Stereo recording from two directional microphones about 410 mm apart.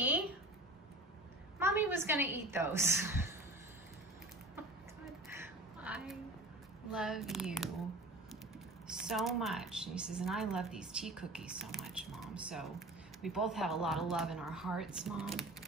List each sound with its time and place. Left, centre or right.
1.6 s a woman's voice: centre
5.3 s a sound: centre
6.9 s a woman's voice: centre
8.8 s a woman's voice: centre